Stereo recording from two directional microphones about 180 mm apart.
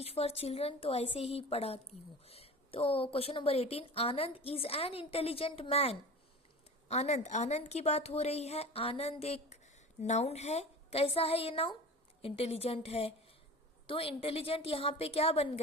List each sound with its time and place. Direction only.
0.0 s a woman's voice: 35° left (ahead or behind)